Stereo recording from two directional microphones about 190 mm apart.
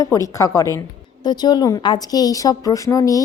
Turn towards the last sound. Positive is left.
turn(degrees=15)  # may be behind; listen again after turning